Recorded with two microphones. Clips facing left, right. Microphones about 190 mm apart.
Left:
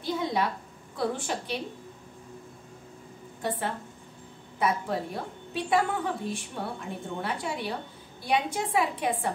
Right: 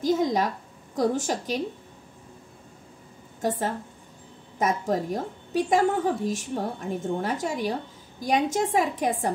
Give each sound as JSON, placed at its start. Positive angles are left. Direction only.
{"t": 0.0, "sound": "a woman's voice", "side_deg": -40}
{"t": 3.4, "sound": "a woman's voice", "side_deg": -45}